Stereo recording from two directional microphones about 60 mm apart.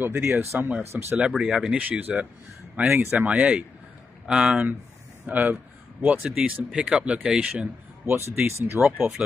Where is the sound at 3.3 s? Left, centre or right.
Centre.